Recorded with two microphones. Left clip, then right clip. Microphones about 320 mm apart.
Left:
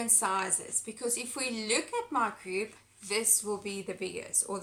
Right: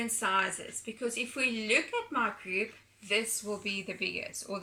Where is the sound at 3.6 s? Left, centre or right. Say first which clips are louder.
Right 2 dB; centre.